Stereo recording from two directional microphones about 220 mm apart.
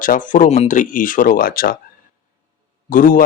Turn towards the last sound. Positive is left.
turn(degrees=40)  # may be behind; listen again after turning